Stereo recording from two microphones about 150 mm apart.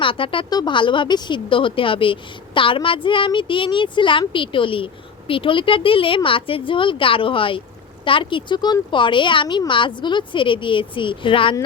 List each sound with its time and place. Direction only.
0.0 s speech: 35° left (ahead or behind)